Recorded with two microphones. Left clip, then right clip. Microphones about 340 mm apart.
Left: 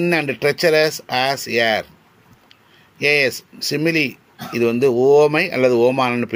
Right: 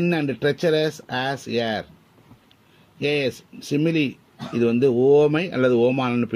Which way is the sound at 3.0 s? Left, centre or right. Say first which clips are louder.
Left 7 dB; left.